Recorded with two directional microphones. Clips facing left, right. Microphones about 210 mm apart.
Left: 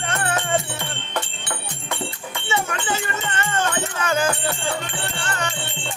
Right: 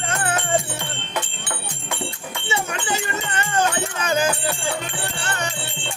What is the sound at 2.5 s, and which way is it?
Music, 20° right (ahead or behind).